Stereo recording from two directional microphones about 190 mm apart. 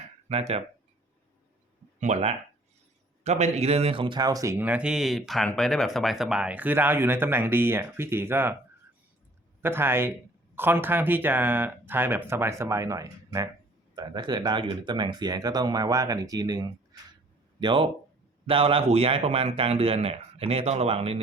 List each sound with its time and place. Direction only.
0.3 s a man's voice: 30° right (ahead or behind)
2.0 s a man's voice: 35° right (ahead or behind); by 8.5 s 10° right (ahead or behind)
9.6 s a man's voice: 10° right (ahead or behind); by 21.2 s 30° right (ahead or behind)